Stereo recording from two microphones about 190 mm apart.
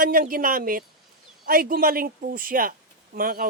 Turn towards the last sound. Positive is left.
turn(degrees=-50)  # may be behind; listen again after turning